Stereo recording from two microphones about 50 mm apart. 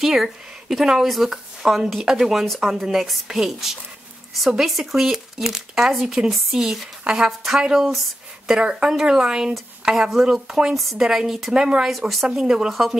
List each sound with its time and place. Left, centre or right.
0.0 s speech: centre
7.1 s speech: centre
11.9 s speech: centre
12.3 s speech: centre